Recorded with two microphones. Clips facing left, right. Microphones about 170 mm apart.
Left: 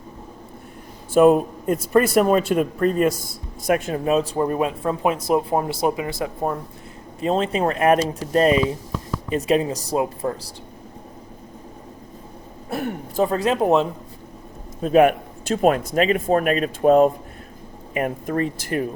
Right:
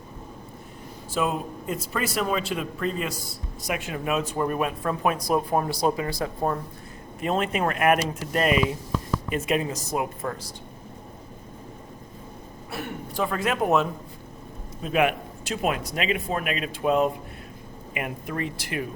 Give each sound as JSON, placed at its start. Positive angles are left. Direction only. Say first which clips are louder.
{"t": 1.1, "sound": "speech", "louder": "left 13 dB", "side_deg": 50}
{"t": 7.2, "sound": "speech", "louder": "left 4 dB", "side_deg": 30}
{"t": 12.7, "sound": "a sound", "louder": "left 7 dB", "side_deg": 45}
{"t": 13.3, "sound": "speech", "louder": "left 4 dB", "side_deg": 30}
{"t": 14.8, "sound": "speech", "louder": "left 8 dB", "side_deg": 40}